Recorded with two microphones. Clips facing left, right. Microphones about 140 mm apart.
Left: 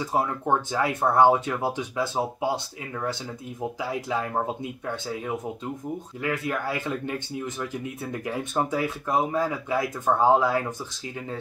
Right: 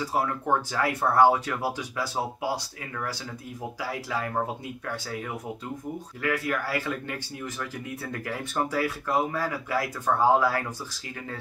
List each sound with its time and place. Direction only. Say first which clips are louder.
0.0 s speech: left 2 dB; 20° left (ahead or behind)